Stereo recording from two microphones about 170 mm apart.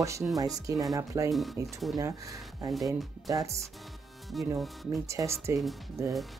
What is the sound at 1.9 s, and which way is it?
Speech, 20° right (ahead or behind).